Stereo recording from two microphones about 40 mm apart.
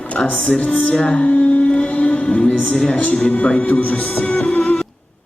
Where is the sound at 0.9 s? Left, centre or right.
Left.